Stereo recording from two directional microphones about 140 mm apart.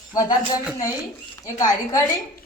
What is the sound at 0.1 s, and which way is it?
Speech, 25° left (ahead or behind).